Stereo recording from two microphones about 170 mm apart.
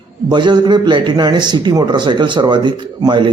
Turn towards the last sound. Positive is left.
turn(degrees=-25)  # may be behind; listen again after turning